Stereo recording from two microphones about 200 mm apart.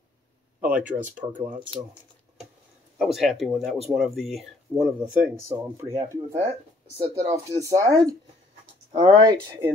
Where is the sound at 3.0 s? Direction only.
Centre (ahead or behind).